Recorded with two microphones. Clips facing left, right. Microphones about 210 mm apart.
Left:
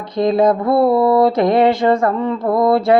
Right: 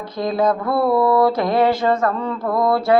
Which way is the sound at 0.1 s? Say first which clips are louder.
Left 5 dB; 25° left (ahead or behind).